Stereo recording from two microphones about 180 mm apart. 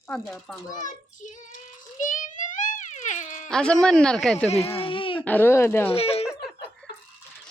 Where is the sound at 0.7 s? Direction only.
45° left (ahead or behind).